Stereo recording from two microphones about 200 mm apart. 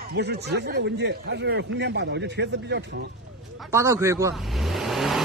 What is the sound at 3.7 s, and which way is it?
Speech, 15° right (ahead or behind).